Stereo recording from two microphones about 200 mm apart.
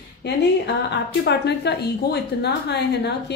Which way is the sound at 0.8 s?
60° left (ahead or behind).